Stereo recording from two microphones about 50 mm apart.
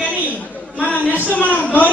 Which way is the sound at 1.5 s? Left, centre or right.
Left.